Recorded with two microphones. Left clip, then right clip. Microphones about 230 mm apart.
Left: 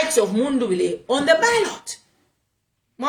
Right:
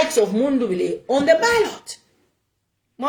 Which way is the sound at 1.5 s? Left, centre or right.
Left.